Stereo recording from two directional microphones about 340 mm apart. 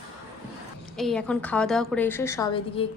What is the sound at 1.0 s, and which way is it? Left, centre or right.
A woman's voice, centre.